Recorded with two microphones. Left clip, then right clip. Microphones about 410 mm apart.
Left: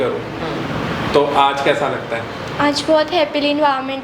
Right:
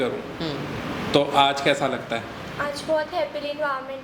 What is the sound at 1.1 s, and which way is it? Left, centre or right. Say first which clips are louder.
Speech: left 5 dB; right.